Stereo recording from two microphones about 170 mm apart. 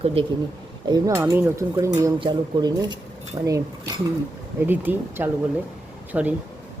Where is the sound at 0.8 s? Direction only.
20° right (ahead or behind).